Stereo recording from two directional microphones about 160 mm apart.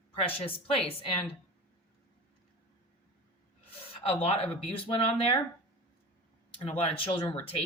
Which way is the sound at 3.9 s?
40° left (ahead or behind).